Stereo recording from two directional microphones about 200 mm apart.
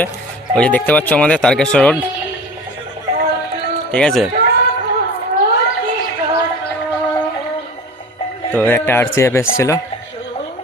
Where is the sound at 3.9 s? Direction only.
Centre (ahead or behind).